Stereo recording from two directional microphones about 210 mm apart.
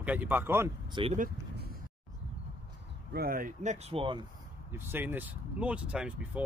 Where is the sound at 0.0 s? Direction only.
5° right (ahead or behind).